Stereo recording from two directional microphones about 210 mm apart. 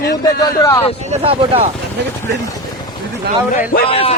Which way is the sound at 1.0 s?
30° right (ahead or behind).